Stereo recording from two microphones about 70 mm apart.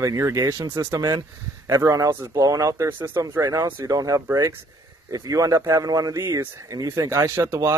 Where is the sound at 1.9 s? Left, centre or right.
Right.